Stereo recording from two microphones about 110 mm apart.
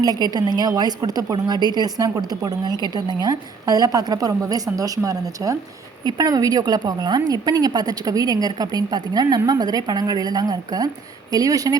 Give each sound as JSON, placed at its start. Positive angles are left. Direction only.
{"t": 0.0, "sound": "a woman's voice", "side_deg": -35}